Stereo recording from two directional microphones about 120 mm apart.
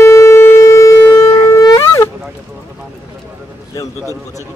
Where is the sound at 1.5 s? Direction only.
35° left (ahead or behind).